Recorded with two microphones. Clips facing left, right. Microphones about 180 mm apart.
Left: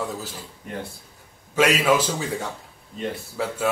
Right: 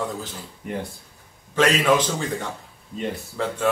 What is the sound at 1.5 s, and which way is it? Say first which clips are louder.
Speech: even; 10° left (ahead or behind).